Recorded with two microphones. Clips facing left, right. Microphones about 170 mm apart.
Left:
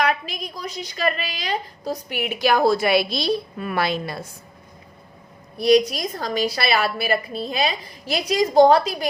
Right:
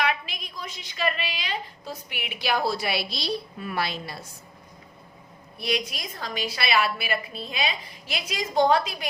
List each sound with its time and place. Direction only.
0.0 s a woman's voice: 40° left (ahead or behind)
5.5 s a woman's voice: 40° left (ahead or behind)